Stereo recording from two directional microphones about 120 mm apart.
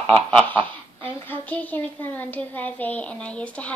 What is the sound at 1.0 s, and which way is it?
A woman's voice, 15° left (ahead or behind).